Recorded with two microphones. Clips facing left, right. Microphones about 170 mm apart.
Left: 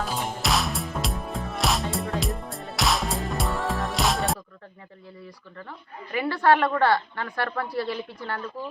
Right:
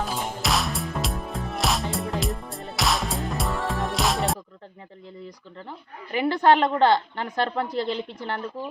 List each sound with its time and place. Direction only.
0.0 s music: centre (ahead or behind)
5.5 s a woman's voice: 20° right (ahead or behind)